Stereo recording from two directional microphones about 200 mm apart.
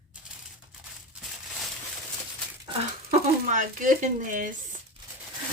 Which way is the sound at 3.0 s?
40° right (ahead or behind).